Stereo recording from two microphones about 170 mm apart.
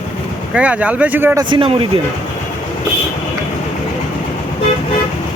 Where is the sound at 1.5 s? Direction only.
30° right (ahead or behind).